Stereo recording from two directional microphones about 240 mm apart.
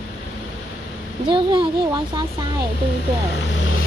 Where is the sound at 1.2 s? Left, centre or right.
Right.